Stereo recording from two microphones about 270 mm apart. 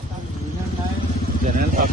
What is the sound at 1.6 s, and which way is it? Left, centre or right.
Vehicle, right.